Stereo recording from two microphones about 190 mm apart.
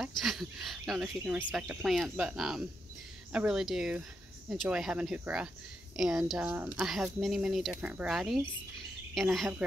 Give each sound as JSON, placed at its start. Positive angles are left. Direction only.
{"t": 0.0, "sound": "speech", "side_deg": 0}